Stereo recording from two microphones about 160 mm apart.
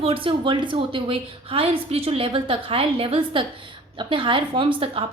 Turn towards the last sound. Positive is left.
turn(degrees=-35)  # may be behind; listen again after turning